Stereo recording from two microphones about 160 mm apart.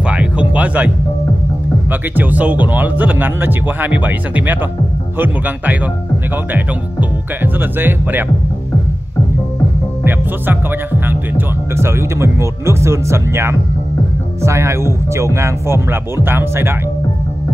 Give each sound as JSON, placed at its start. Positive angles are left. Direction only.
{"t": 0.1, "sound": "music", "side_deg": -10}
{"t": 1.9, "sound": "speech", "side_deg": -10}
{"t": 6.5, "sound": "speech", "side_deg": -10}
{"t": 10.0, "sound": "speech", "side_deg": -10}